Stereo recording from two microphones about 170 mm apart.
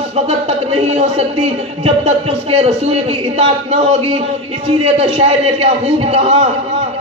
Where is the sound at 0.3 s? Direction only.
35° right (ahead or behind).